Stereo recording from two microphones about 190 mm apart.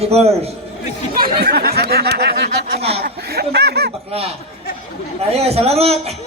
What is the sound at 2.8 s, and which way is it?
Speech, 30° right (ahead or behind).